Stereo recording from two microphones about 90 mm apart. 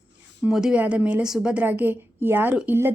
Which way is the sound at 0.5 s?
5° right (ahead or behind).